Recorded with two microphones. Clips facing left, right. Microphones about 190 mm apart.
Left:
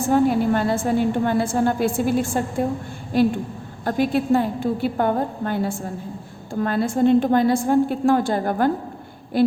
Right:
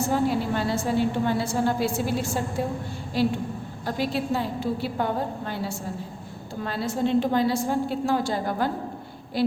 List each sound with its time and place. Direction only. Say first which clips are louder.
0.1 s a woman's voice: left 9 dB; 50° left (ahead or behind)